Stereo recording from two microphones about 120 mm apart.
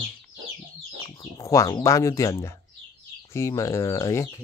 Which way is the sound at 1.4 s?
25° left (ahead or behind).